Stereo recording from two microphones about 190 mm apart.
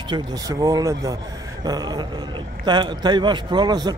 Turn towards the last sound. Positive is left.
turn(degrees=-20)  # may be behind; listen again after turning